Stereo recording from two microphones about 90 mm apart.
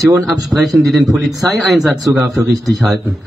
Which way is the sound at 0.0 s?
40° right (ahead or behind).